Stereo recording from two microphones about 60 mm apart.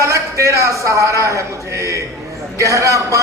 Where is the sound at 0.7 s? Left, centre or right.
Right.